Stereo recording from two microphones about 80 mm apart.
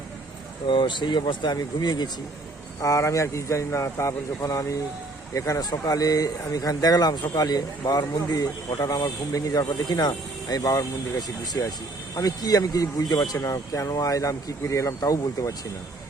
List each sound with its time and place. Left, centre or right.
0.7 s speech: left
2.8 s speech: left